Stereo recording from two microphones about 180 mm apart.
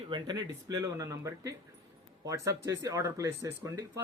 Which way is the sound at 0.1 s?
25° right (ahead or behind).